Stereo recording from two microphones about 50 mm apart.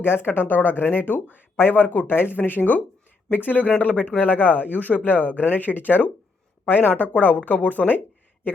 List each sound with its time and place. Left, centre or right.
0.0 s speech: left